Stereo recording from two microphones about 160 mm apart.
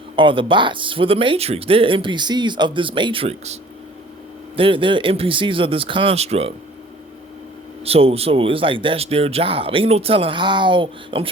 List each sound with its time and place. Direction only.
0.2 s speech: 35° right (ahead or behind)
7.9 s speech: 40° right (ahead or behind)